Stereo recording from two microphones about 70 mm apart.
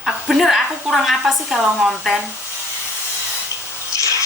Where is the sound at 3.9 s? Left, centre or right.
Left.